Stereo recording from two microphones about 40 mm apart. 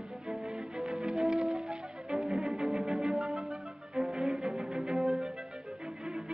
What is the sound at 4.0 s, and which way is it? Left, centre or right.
Cello, centre.